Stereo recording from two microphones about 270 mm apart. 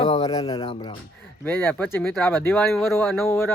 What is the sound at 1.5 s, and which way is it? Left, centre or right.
Speech, centre.